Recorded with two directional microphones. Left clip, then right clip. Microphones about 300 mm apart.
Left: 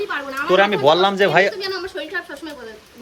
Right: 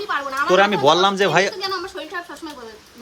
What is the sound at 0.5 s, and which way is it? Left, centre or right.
Speech, centre.